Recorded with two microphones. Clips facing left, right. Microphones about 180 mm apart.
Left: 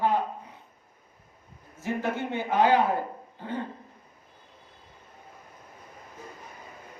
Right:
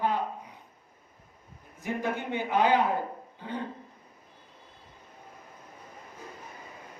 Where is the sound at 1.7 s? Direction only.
15° right (ahead or behind).